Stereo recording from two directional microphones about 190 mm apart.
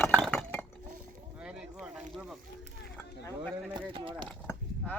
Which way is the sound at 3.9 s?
25° right (ahead or behind).